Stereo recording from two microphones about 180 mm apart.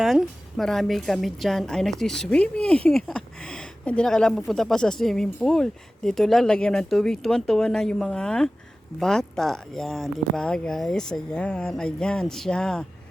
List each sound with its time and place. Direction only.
0.0 s a woman's voice: centre (ahead or behind)